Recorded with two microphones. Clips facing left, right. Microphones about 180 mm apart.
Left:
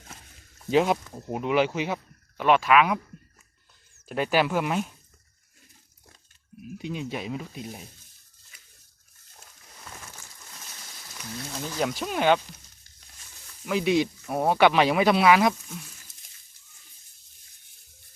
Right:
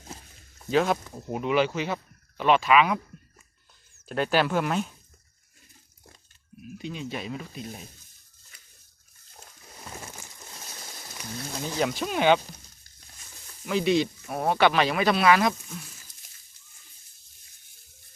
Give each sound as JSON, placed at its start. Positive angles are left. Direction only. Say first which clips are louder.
{"t": 0.7, "sound": "speech", "louder": "left 2 dB", "side_deg": 15}
{"t": 2.4, "sound": "speech", "louder": "even", "side_deg": 5}
{"t": 4.1, "sound": "speech", "louder": "even", "side_deg": 10}
{"t": 6.7, "sound": "speech", "louder": "left 2 dB", "side_deg": 10}
{"t": 9.8, "sound": "a sound", "louder": "right 4 dB", "side_deg": -30}
{"t": 11.8, "sound": "speech", "louder": "right 1 dB", "side_deg": 5}
{"t": 13.7, "sound": "speech", "louder": "even", "side_deg": 10}